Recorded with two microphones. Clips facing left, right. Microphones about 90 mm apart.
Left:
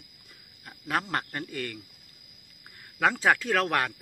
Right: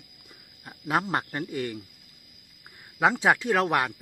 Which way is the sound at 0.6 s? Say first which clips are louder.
Right 3 dB; 20° right (ahead or behind).